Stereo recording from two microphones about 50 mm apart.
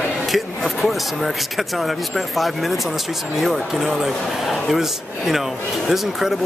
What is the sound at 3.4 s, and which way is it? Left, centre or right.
Speech, centre.